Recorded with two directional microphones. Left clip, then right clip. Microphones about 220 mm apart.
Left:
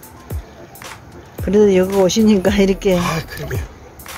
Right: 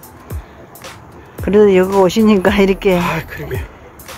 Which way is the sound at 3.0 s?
30° left (ahead or behind).